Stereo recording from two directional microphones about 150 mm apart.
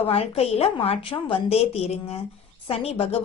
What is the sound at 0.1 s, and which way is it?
A woman's voice, 40° left (ahead or behind).